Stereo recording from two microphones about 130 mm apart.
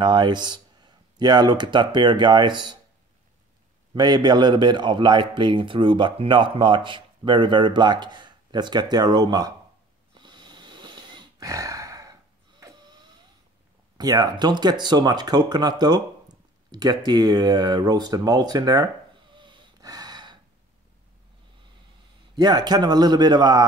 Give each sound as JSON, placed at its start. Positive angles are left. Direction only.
{"t": 0.0, "sound": "speech", "side_deg": -35}
{"t": 3.9, "sound": "a man's voice", "side_deg": -35}
{"t": 10.1, "sound": "snoring", "side_deg": -35}
{"t": 13.9, "sound": "a man's voice", "side_deg": -30}
{"t": 19.3, "sound": "snort", "side_deg": -40}
{"t": 22.3, "sound": "a man's voice", "side_deg": -30}